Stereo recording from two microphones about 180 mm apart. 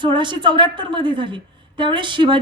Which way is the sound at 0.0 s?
25° right (ahead or behind).